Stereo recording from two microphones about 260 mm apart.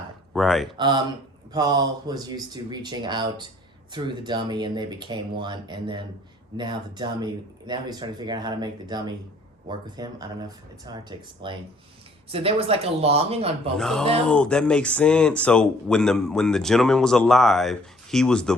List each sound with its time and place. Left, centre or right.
0.3 s speech: centre
0.8 s speech: centre
13.7 s speech: centre